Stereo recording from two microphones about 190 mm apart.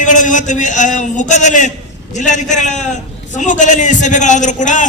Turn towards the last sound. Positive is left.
turn(degrees=40)  # may be behind; listen again after turning